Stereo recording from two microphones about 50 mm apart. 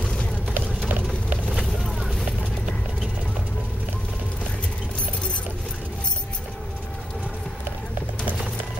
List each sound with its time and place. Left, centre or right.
0.6 s clip-clop: right
1.5 s vehicle: centre